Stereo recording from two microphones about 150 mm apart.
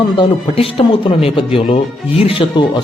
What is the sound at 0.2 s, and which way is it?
Speech, 40° left (ahead or behind).